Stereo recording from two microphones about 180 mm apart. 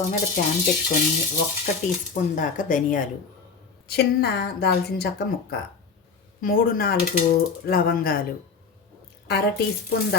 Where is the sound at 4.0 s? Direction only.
65° left (ahead or behind).